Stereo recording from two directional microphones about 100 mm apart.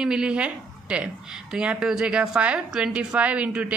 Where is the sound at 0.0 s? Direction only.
5° right (ahead or behind).